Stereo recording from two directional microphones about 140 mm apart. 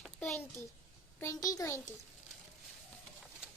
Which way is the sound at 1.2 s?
25° left (ahead or behind).